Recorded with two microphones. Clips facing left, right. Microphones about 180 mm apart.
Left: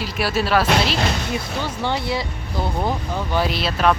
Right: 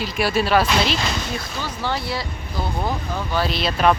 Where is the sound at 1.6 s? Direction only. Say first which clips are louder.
Even; 20° left (ahead or behind); by 3.9 s centre (ahead or behind).